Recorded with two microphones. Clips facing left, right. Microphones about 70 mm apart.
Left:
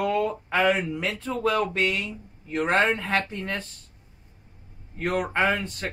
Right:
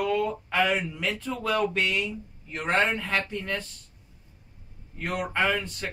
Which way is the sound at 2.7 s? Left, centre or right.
Left.